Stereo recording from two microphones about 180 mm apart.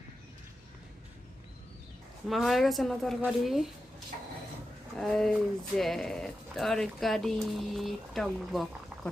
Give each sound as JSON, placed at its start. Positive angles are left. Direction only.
{"t": 2.3, "sound": "speech", "side_deg": 0}
{"t": 4.9, "sound": "speech", "side_deg": 0}